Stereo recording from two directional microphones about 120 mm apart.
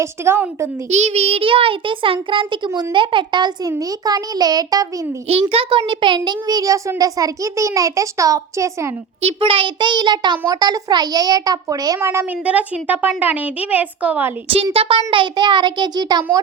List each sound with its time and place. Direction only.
0.0 s a child's voice: 20° right (ahead or behind)
0.9 s a child's voice: 70° right (ahead or behind); by 4.9 s 30° right (ahead or behind)
5.3 s a child's voice: 50° right (ahead or behind); by 8.9 s 25° right (ahead or behind)
9.2 s a child's voice: 50° right (ahead or behind); by 12.2 s 20° right (ahead or behind)
12.5 s a woman's voice: 10° right (ahead or behind)
14.4 s a child's voice: 50° right (ahead or behind); by 16.4 s 35° right (ahead or behind)